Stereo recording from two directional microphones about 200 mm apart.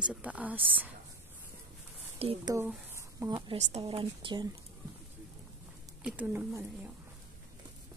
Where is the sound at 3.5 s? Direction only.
30° right (ahead or behind).